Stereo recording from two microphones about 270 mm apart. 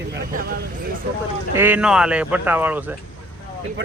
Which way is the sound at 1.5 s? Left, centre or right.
Centre.